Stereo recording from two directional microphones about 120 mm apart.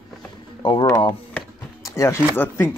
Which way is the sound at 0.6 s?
40° left (ahead or behind).